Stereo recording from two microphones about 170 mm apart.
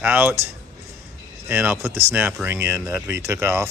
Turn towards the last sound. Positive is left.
turn(degrees=-15)  # may be behind; listen again after turning